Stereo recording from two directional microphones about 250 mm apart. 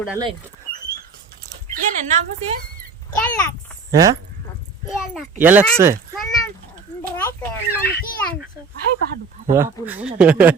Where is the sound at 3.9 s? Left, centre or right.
Centre.